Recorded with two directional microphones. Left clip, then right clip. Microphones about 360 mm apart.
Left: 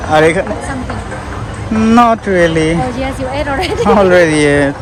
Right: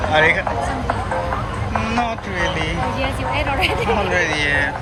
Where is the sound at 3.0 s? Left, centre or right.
Left.